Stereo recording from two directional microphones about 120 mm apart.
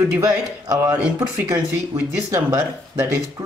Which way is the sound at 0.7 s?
25° right (ahead or behind).